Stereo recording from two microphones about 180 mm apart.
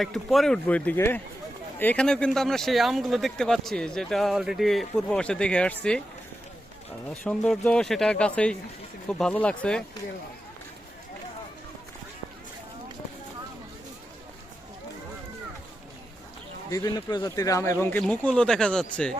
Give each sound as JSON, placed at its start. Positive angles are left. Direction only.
{"t": 0.0, "sound": "speech", "side_deg": 0}
{"t": 7.1, "sound": "speech", "side_deg": 5}
{"t": 16.6, "sound": "a man's voice", "side_deg": 20}